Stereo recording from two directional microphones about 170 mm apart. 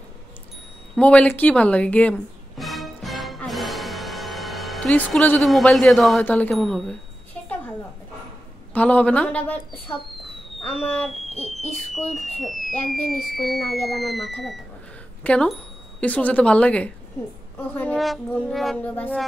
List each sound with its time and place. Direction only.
0.9 s music: 5° left (ahead or behind)
6.5 s speech: centre (ahead or behind)
7.3 s a sound: 10° left (ahead or behind)
8.7 s speech: 10° left (ahead or behind)
11.2 s owl: 40° left (ahead or behind)
12.1 s a woman's voice: centre (ahead or behind)